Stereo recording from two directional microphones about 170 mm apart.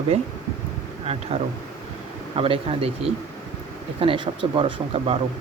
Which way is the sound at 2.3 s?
35° right (ahead or behind).